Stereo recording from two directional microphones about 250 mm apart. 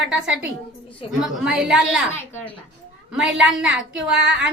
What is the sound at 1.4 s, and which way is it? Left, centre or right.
Speech, centre.